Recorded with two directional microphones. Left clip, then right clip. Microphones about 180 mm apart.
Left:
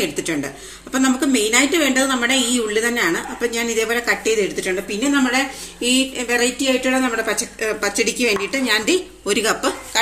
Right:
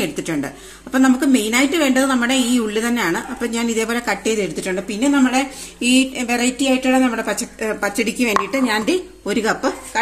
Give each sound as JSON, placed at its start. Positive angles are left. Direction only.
{"t": 0.0, "sound": "a woman's voice", "side_deg": -50}